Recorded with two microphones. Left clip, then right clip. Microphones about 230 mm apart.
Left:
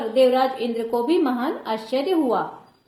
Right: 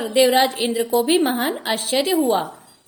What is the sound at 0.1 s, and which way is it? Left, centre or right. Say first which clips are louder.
A woman's voice: right 2 dB; right.